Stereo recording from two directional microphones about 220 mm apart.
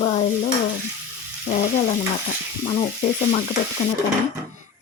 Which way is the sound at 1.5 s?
35° left (ahead or behind).